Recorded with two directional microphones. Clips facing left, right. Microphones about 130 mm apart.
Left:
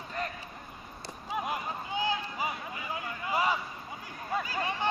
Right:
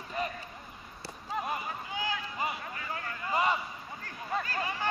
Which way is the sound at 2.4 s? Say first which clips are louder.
Even; 5° left (ahead or behind).